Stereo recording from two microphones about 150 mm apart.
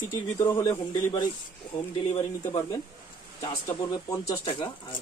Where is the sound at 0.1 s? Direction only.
15° left (ahead or behind).